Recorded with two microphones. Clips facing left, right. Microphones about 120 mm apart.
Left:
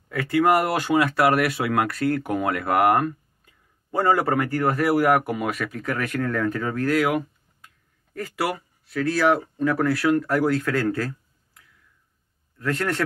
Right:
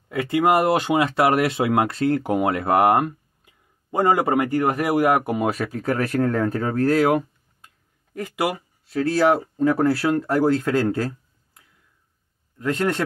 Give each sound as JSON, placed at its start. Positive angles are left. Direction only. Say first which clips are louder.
{"t": 0.1, "sound": "speech", "louder": "right 1 dB", "side_deg": -20}
{"t": 8.1, "sound": "speech", "louder": "right 2 dB", "side_deg": -20}